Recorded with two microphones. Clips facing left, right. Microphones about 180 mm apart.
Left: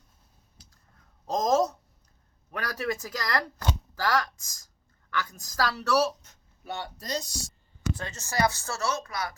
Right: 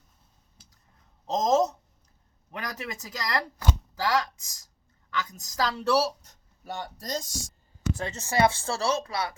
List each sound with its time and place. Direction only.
1.3 s a sound: 20° right (ahead or behind)
2.5 s speech: 20° right (ahead or behind); by 7.5 s 45° right (ahead or behind)
7.9 s speech: 25° right (ahead or behind)